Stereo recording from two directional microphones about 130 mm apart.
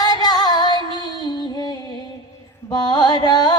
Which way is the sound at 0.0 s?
30° left (ahead or behind).